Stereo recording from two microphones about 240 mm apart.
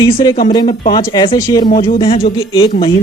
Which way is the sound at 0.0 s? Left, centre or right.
Centre.